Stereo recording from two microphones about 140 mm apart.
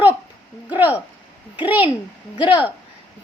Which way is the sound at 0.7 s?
10° right (ahead or behind).